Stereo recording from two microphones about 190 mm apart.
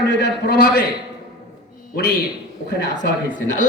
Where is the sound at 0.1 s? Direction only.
60° left (ahead or behind).